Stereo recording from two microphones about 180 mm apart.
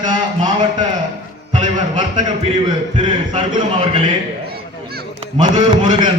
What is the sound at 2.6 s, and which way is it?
Speech, 25° right (ahead or behind).